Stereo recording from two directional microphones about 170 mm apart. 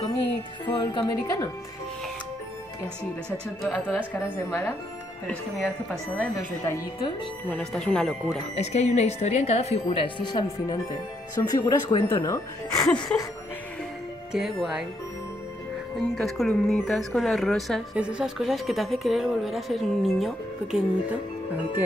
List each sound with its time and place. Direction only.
0.7 s speech: 25° left (ahead or behind)
3.6 s speech: centre (ahead or behind)
4.1 s speech: 15° left (ahead or behind)
8.5 s a woman's voice: 40° left (ahead or behind); by 13.3 s 20° left (ahead or behind)
14.3 s speech: 5° right (ahead or behind)
16.0 s speech: centre (ahead or behind)